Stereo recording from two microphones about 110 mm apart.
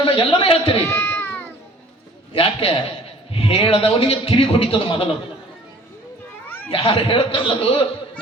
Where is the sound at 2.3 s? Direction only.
55° left (ahead or behind).